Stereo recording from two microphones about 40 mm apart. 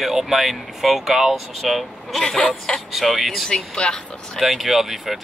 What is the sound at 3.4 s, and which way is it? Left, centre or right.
Speech, centre.